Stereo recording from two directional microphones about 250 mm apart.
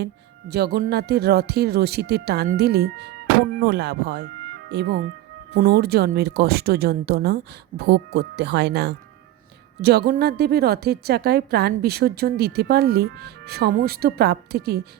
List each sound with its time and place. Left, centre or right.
0.0 s a woman's voice: right